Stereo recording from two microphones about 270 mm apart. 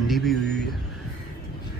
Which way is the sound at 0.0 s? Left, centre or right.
Centre.